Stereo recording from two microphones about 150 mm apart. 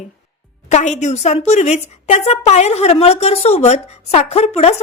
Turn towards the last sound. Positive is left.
turn(degrees=45)  # may be behind; listen again after turning